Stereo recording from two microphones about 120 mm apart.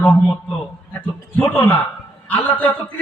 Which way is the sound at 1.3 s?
15° left (ahead or behind).